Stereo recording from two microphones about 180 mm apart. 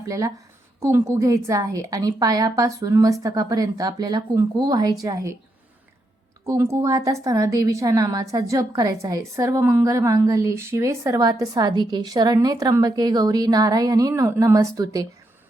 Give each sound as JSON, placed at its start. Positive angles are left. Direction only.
{"t": 0.1, "sound": "a woman's voice", "side_deg": -20}
{"t": 6.4, "sound": "a woman's voice", "side_deg": -15}